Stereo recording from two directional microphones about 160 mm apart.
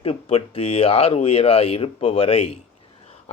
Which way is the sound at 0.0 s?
40° left (ahead or behind).